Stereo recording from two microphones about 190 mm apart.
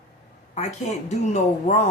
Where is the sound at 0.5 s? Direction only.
35° left (ahead or behind).